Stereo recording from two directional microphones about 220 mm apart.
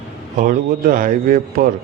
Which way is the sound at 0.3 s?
40° right (ahead or behind).